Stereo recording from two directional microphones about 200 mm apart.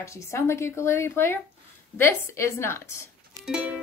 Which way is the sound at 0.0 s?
15° left (ahead or behind).